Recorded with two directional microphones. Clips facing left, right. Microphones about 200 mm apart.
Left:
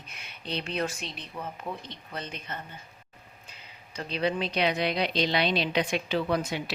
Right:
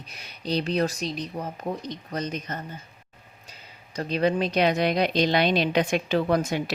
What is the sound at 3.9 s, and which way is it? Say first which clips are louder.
Speech: right 5 dB; 45° right (ahead or behind).